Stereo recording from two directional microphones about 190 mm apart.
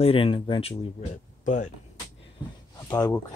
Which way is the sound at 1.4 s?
40° left (ahead or behind).